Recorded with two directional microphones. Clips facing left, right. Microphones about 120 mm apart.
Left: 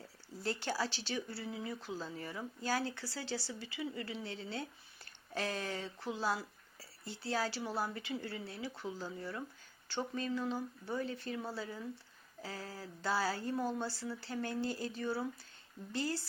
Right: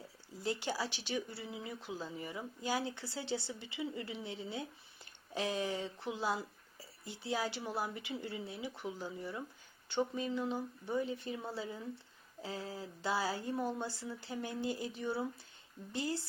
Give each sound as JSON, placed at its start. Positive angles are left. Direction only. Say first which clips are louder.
{"t": 0.4, "sound": "speech", "louder": "even", "side_deg": -15}